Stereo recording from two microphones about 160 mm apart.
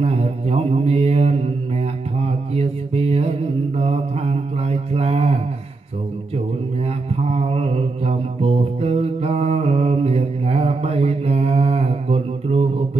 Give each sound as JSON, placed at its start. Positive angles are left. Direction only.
{"t": 0.0, "sound": "mantra", "side_deg": -40}
{"t": 7.2, "sound": "music", "side_deg": -40}